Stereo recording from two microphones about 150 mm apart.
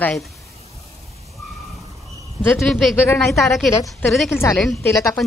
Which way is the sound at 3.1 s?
20° left (ahead or behind).